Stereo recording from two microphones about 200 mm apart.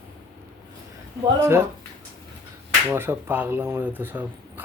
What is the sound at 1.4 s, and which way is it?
Speech, 10° right (ahead or behind).